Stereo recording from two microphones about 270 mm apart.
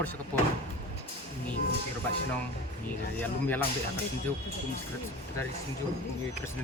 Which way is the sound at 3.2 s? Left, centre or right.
Centre.